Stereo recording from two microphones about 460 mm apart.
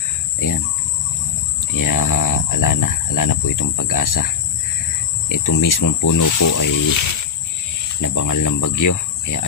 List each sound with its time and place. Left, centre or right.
1.6 s speech: left
5.3 s speech: left
8.0 s speech: left